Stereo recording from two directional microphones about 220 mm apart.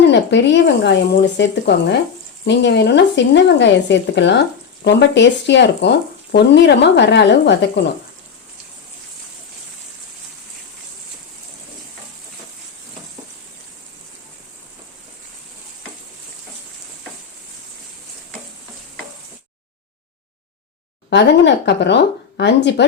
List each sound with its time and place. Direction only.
0.0 s speech: 50° left (ahead or behind)
21.1 s speech: 55° left (ahead or behind)